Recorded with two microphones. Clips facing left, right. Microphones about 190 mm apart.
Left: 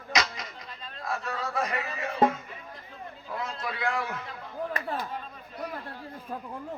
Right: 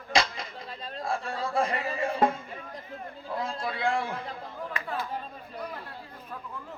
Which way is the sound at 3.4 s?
30° right (ahead or behind).